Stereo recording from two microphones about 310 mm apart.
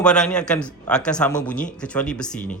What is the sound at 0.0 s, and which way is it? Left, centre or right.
A man's voice, centre.